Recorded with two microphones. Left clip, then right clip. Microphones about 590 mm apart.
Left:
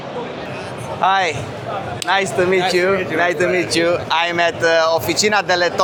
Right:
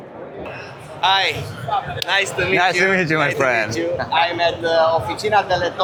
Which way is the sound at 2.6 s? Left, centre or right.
Right.